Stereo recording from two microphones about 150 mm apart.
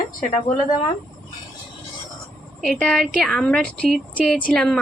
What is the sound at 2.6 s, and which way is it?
Speech, 5° left (ahead or behind).